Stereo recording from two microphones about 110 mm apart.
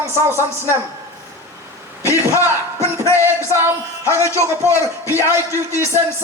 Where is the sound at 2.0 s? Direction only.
20° right (ahead or behind).